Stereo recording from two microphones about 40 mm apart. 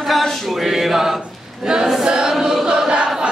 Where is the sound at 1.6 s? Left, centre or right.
Centre.